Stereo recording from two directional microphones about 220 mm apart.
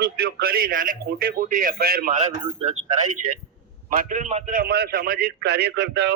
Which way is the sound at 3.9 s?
35° right (ahead or behind).